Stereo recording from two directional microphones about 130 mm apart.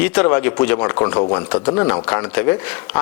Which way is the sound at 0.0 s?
10° left (ahead or behind).